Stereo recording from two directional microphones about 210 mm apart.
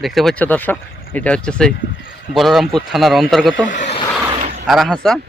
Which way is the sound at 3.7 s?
35° left (ahead or behind).